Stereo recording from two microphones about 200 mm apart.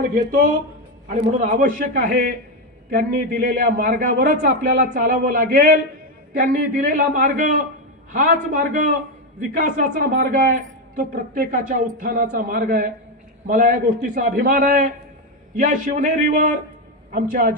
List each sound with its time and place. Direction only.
1.0 s a woman's voice: 40° right (ahead or behind)